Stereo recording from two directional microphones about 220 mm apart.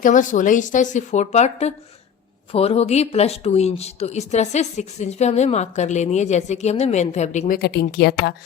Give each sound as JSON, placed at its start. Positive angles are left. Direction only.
{"t": 0.0, "sound": "speech", "side_deg": 35}